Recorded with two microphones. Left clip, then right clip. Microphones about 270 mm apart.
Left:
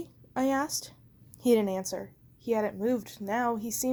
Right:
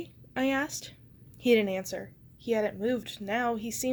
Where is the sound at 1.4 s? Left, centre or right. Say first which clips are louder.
Right 1 dB; left.